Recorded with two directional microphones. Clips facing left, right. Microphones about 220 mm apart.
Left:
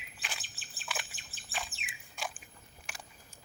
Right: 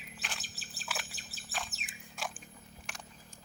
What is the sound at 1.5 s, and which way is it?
Bird, 5° left (ahead or behind).